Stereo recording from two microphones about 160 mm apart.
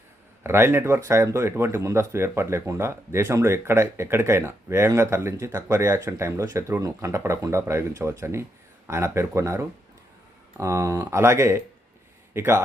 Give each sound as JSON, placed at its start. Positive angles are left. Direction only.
{"t": 0.4, "sound": "speech", "side_deg": -15}